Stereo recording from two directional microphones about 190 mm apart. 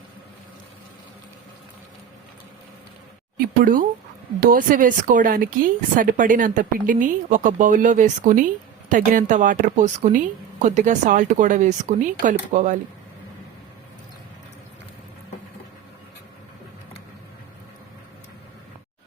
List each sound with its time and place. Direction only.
3.3 s speech: 50° right (ahead or behind)